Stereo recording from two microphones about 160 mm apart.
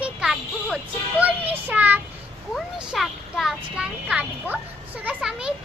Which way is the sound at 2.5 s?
Centre (ahead or behind).